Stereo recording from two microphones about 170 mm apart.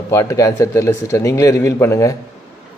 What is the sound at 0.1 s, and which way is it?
Speech, 20° left (ahead or behind).